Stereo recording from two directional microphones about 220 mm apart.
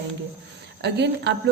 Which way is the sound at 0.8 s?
50° right (ahead or behind).